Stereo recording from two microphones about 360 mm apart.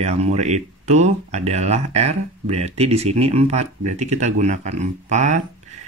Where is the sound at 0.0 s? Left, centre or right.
Centre.